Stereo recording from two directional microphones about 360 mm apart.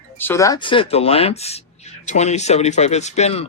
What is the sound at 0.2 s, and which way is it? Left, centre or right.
Speech, centre.